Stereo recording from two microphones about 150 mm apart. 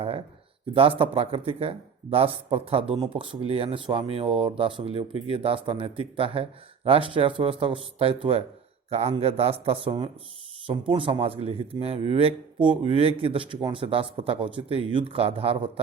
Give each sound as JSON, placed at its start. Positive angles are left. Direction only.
{"t": 0.7, "sound": "speech", "side_deg": -35}